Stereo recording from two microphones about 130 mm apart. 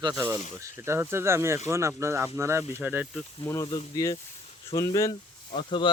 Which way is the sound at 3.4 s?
20° left (ahead or behind).